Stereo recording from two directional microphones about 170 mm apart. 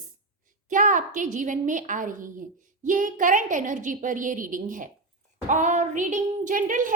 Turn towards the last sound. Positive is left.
turn(degrees=-50)  # may be behind; listen again after turning